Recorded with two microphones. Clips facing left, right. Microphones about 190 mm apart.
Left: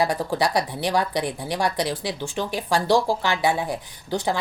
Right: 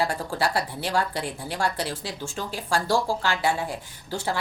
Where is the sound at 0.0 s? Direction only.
15° left (ahead or behind).